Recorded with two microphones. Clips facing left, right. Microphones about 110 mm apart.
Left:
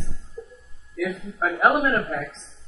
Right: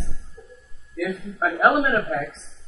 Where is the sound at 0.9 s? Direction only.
Centre (ahead or behind).